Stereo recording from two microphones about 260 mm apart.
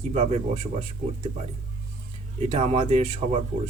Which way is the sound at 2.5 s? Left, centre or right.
Right.